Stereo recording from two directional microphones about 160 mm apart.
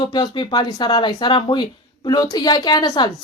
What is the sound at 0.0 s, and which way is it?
A woman's voice, 30° left (ahead or behind).